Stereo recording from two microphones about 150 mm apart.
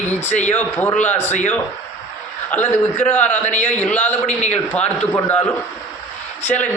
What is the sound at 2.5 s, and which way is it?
Speech, 10° left (ahead or behind).